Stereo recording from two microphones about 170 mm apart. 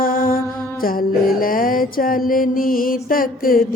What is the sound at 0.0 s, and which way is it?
Music, 55° left (ahead or behind).